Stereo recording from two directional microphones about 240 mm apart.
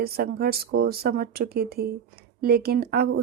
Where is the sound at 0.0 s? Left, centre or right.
Right.